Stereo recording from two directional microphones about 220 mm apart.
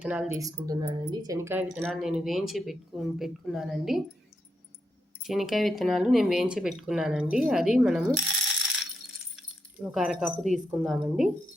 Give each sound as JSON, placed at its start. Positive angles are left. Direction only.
{"t": 0.0, "sound": "speech", "side_deg": -5}
{"t": 0.3, "sound": "speech", "side_deg": -15}
{"t": 5.2, "sound": "speech", "side_deg": 0}
{"t": 9.3, "sound": "keys jangling", "side_deg": -5}
{"t": 10.7, "sound": "speech", "side_deg": 0}